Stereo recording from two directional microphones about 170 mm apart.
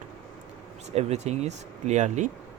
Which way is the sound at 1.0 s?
40° right (ahead or behind).